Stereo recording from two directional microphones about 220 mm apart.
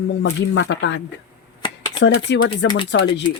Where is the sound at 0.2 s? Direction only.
50° left (ahead or behind).